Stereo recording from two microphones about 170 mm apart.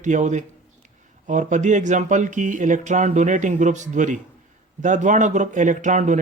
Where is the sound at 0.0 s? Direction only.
45° right (ahead or behind).